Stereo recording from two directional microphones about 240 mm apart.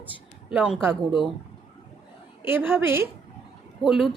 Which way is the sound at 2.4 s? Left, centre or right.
Centre.